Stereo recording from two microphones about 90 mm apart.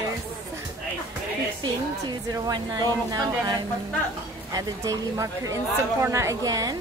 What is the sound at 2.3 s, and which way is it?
A woman's voice, 40° right (ahead or behind).